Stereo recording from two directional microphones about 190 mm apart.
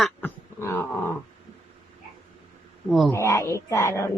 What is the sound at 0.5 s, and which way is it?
Speech, 15° left (ahead or behind).